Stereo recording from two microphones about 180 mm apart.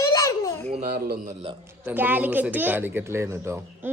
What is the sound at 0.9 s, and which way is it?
Speech, 55° right (ahead or behind).